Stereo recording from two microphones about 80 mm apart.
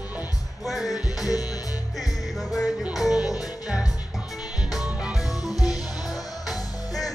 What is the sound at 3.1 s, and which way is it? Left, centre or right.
Music, left.